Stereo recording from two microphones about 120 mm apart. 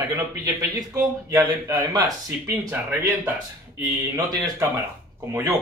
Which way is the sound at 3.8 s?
35° right (ahead or behind).